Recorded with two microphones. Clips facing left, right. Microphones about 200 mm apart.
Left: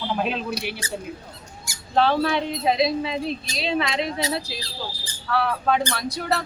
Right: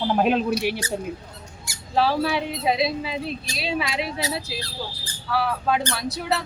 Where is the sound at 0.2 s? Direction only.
50° right (ahead or behind).